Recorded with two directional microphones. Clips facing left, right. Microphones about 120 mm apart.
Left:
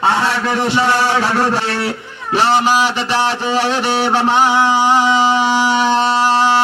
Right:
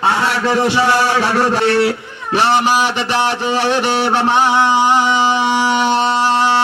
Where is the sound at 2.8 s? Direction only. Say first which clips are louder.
Even; 20° right (ahead or behind).